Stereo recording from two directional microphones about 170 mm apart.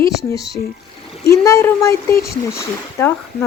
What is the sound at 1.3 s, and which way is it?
A woman's voice, 20° left (ahead or behind).